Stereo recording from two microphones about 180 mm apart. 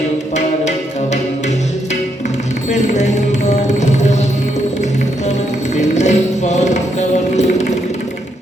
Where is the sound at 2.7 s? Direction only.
40° left (ahead or behind).